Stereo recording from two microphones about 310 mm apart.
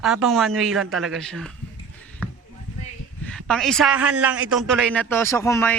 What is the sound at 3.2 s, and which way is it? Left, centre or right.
A man's voice, centre.